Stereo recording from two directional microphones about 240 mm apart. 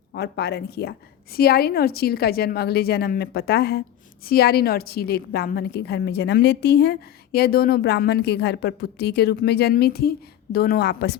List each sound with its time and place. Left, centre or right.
0.1 s a woman's voice: left